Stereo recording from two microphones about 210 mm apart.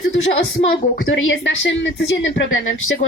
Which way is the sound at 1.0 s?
65° left (ahead or behind).